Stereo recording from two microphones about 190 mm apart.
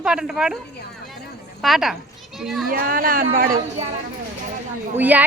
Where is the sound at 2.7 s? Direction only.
50° right (ahead or behind).